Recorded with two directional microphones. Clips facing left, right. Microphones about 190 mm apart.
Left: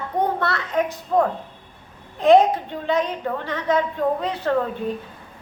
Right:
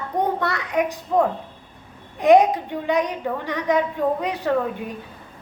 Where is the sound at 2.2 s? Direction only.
15° right (ahead or behind).